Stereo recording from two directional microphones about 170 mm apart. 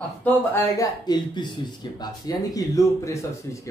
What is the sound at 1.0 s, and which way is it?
Speech, 25° left (ahead or behind).